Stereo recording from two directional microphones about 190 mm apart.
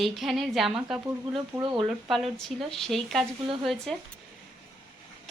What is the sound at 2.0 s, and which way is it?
A woman's voice, centre (ahead or behind).